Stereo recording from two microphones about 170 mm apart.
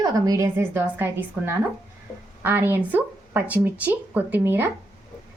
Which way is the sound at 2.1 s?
15° left (ahead or behind).